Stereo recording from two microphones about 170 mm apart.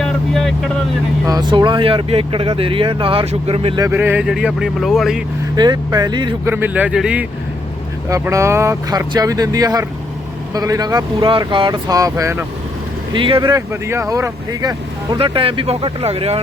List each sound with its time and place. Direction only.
0.0 s vehicle: centre (ahead or behind)
1.3 s speech: 25° right (ahead or behind)
3.8 s speech: 10° right (ahead or behind)
5.5 s speech: 25° right (ahead or behind)
6.5 s speech: 10° right (ahead or behind)
8.1 s speech: 15° right (ahead or behind)
13.1 s speech: 30° right (ahead or behind)
15.2 s speech: 30° right (ahead or behind)